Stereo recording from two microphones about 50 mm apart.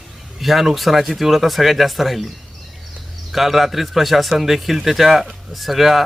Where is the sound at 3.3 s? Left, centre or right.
Centre.